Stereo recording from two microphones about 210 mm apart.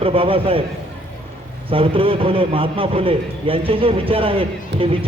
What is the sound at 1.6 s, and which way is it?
A man's voice, 25° right (ahead or behind).